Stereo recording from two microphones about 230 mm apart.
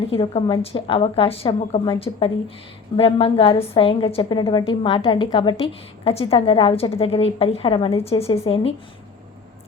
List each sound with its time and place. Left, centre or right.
0.1 s a woman's voice: left